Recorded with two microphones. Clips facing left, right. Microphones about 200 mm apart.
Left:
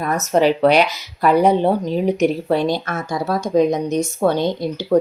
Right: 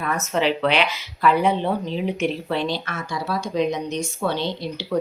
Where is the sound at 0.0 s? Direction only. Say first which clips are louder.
Left 6 dB; 40° left (ahead or behind).